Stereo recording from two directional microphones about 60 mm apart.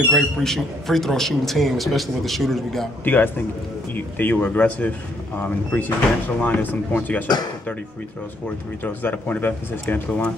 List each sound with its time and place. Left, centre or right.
0.1 s a man's voice: centre
3.0 s speech: left
8.8 s speech: left